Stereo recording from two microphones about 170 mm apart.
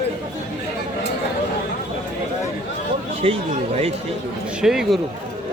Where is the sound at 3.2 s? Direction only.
35° right (ahead or behind).